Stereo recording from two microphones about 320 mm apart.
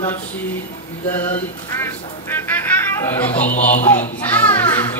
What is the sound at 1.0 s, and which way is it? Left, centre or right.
Speech, centre.